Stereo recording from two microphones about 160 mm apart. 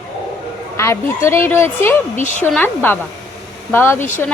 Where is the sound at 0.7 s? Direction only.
15° left (ahead or behind).